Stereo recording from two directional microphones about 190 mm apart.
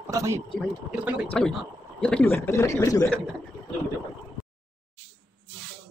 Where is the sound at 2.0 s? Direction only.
10° left (ahead or behind).